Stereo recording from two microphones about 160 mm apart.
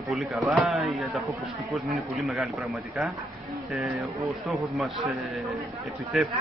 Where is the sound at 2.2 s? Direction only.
Centre (ahead or behind).